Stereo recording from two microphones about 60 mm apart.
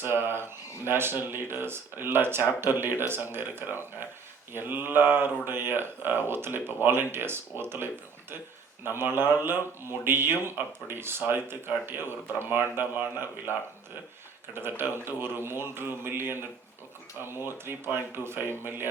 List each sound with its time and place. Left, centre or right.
0.0 s speech: right
14.5 s speech: right